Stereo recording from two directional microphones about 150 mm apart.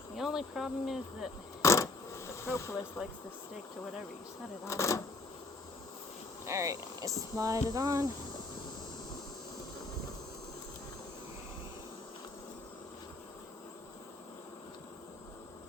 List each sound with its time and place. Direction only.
0.2 s insect: 5° right (ahead or behind)
1.6 s a sound: 20° left (ahead or behind)
4.6 s speech: 20° left (ahead or behind)
6.4 s speech: 20° right (ahead or behind)